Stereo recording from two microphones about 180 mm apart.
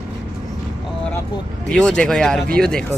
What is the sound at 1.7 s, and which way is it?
Speech, 5° left (ahead or behind).